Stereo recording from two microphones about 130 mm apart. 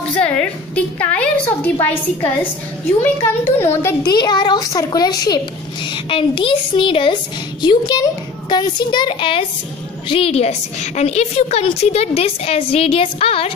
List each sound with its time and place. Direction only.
0.1 s a woman's voice: 10° left (ahead or behind)
3.0 s a woman's voice: 20° left (ahead or behind)
4.0 s a child's voice: 35° left (ahead or behind)